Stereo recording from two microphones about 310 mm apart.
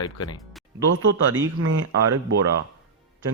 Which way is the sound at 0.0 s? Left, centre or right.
Centre.